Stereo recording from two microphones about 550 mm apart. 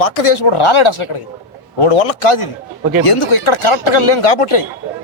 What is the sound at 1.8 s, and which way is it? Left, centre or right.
A man's voice, left.